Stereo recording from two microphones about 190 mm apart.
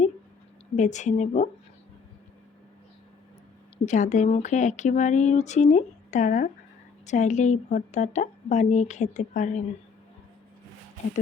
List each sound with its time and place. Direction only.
0.8 s a woman's voice: 40° left (ahead or behind)
3.8 s a woman's voice: 40° left (ahead or behind)